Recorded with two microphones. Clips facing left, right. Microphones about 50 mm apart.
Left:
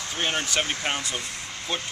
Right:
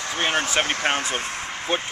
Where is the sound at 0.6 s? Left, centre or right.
Right.